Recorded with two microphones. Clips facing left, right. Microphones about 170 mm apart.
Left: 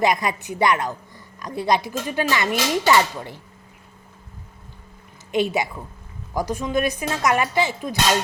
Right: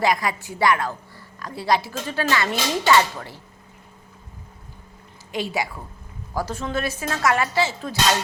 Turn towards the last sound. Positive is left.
turn(degrees=15)  # may be behind; listen again after turning